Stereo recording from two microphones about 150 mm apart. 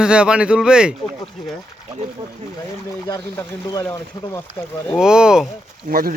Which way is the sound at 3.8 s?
10° left (ahead or behind).